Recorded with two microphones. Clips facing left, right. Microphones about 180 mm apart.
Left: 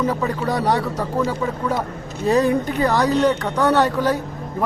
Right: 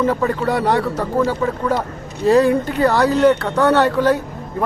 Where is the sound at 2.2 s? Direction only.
15° left (ahead or behind).